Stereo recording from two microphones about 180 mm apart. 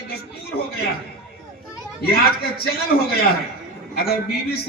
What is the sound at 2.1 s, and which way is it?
A man's voice, 60° left (ahead or behind).